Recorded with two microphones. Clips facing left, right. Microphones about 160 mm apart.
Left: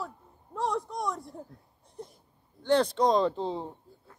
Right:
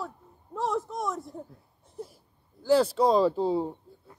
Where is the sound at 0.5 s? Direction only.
Centre (ahead or behind).